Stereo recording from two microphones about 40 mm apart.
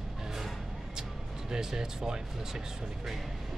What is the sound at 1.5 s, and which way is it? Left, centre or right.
Speech, centre.